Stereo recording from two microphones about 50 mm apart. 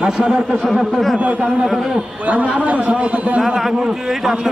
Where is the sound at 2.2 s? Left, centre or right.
Right.